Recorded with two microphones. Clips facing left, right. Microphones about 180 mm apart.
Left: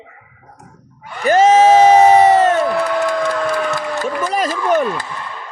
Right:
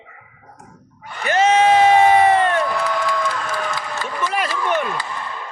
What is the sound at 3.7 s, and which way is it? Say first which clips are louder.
Music: left 7 dB; 45° left (ahead or behind).